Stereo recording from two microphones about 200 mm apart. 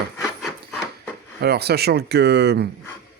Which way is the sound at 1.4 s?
55° right (ahead or behind).